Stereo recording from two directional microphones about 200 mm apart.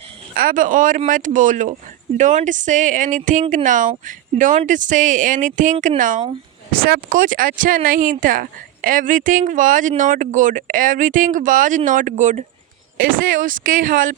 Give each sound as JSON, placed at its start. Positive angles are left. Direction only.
{"t": 0.3, "sound": "speech", "side_deg": -45}